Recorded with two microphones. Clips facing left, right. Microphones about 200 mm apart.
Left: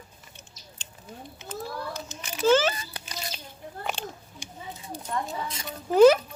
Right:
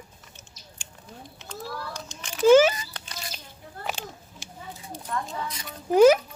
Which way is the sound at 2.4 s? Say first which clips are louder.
Right 6 dB; 10° right (ahead or behind).